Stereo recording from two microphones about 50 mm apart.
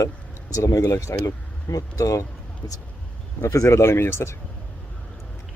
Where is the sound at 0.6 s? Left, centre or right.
Left.